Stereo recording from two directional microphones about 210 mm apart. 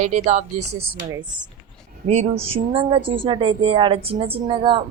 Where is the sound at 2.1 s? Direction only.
30° right (ahead or behind).